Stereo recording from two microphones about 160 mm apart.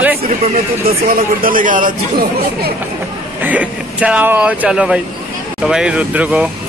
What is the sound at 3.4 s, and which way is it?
Speech, 10° right (ahead or behind).